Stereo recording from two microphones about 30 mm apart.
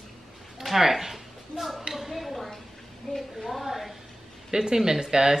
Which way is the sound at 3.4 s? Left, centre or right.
Centre.